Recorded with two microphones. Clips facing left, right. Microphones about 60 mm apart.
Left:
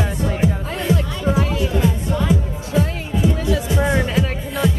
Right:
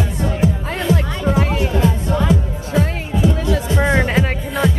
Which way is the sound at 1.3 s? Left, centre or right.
Right.